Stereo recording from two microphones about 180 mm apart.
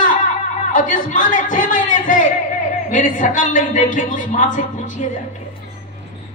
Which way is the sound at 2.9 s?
45° left (ahead or behind).